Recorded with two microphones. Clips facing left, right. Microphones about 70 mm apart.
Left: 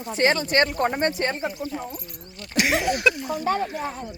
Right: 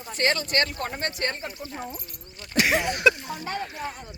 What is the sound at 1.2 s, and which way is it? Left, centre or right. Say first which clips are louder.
Speech: left 4 dB; centre.